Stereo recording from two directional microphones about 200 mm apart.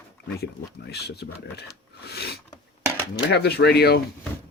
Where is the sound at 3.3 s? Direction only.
55° left (ahead or behind).